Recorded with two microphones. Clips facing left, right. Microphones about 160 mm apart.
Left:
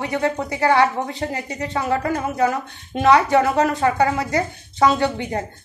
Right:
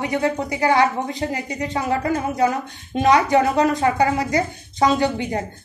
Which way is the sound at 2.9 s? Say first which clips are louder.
Left 1 dB; 15° right (ahead or behind).